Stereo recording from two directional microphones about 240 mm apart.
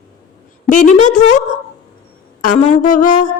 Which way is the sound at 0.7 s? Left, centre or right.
Left.